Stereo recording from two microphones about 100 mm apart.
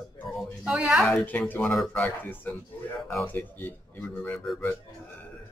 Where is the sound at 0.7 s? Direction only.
5° right (ahead or behind).